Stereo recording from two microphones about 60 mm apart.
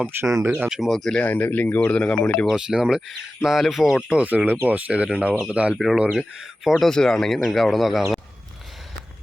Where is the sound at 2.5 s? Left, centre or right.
Centre.